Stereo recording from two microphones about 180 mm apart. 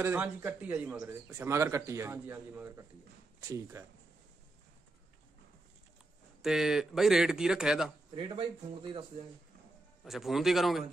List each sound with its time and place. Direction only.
0.0 s a man's voice: 10° right (ahead or behind)
6.4 s speech: centre (ahead or behind)
8.1 s speech: 30° right (ahead or behind)
10.0 s speech: centre (ahead or behind)